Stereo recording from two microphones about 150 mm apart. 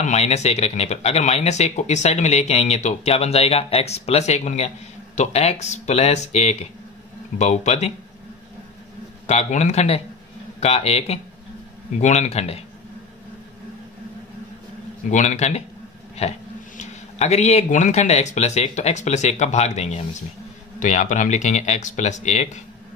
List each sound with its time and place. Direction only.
0.0 s speech: 50° left (ahead or behind)
9.3 s speech: 50° left (ahead or behind)
15.0 s speech: 50° left (ahead or behind)